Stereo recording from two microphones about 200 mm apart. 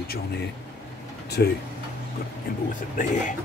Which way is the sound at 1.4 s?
55° left (ahead or behind).